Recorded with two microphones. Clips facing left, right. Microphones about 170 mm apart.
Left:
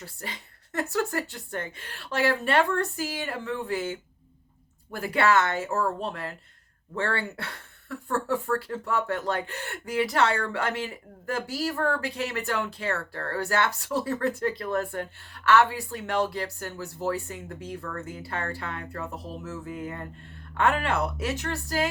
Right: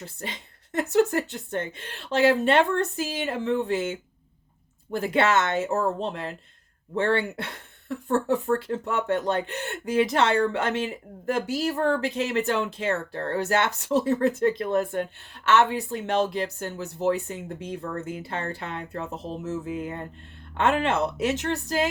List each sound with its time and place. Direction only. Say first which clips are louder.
0.0 s speech: right 3 dB; 20° right (ahead or behind)